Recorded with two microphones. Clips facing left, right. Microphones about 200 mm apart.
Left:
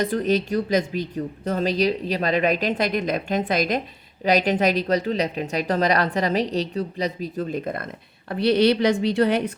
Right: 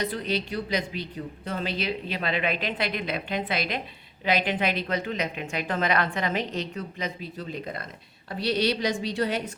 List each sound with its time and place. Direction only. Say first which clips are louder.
0.0 s a woman's voice: left 7 dB; 45° left (ahead or behind)